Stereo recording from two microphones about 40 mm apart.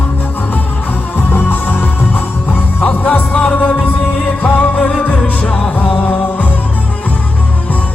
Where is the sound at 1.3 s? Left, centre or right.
Left.